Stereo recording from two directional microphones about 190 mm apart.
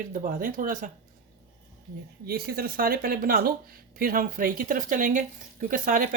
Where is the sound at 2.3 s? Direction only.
50° right (ahead or behind).